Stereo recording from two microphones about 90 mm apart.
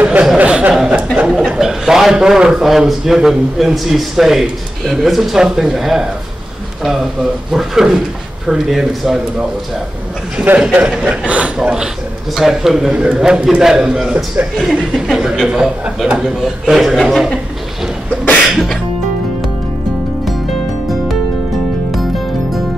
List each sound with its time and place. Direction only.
0.0 s a sound: 10° right (ahead or behind)
1.6 s a man's voice: 5° right (ahead or behind)
7.5 s a man's voice: 5° right (ahead or behind)
10.3 s a man's voice: 20° right (ahead or behind)
14.6 s a man's voice: 5° right (ahead or behind)